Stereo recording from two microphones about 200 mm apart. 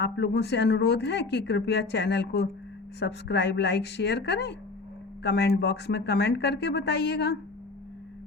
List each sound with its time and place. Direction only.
0.0 s speech: 55° left (ahead or behind)